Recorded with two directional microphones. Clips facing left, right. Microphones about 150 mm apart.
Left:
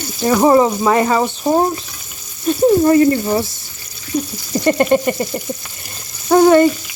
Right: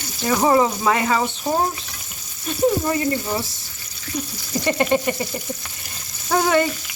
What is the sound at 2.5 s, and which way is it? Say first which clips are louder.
Speech: left 10 dB; 35° left (ahead or behind).